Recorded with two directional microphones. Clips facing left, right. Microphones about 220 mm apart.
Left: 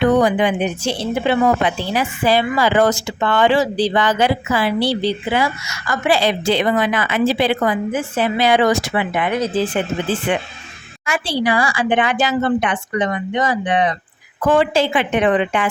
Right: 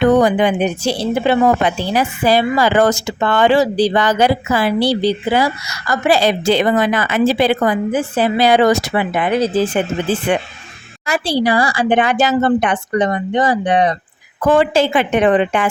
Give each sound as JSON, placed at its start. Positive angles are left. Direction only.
{"t": 0.0, "sound": "a woman's voice", "side_deg": -45}
{"t": 10.3, "sound": "a woman's voice", "side_deg": -45}